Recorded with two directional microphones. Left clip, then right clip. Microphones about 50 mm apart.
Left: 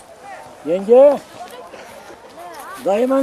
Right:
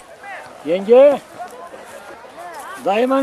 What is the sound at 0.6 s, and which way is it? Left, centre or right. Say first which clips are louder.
Speech: even; right.